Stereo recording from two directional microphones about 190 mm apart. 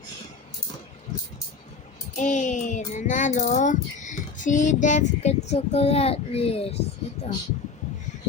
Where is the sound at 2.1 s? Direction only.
40° left (ahead or behind).